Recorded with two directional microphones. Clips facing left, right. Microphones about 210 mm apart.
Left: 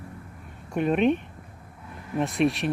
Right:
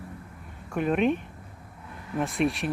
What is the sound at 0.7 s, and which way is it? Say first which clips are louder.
Speech: left 2 dB; centre (ahead or behind).